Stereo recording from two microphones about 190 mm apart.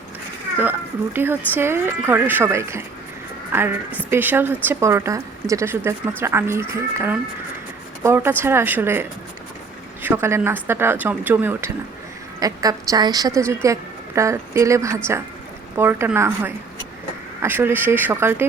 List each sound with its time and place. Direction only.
0.6 s a woman's voice: 10° right (ahead or behind)